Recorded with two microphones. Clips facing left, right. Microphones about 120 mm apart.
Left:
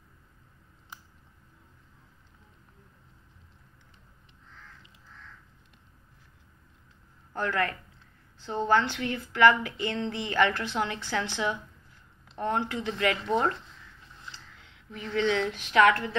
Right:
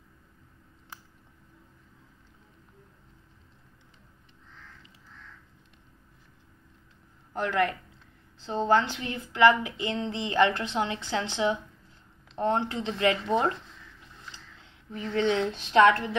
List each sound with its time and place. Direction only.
7.3 s a woman's voice: 20° right (ahead or behind)
14.6 s a woman's voice: 35° right (ahead or behind)